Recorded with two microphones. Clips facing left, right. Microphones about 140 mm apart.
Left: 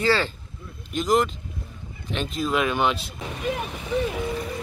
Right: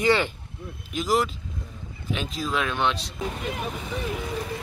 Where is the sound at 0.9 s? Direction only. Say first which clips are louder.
Left 3 dB; 5° right (ahead or behind).